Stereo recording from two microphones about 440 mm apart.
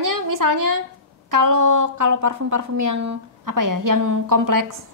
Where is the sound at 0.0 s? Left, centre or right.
Right.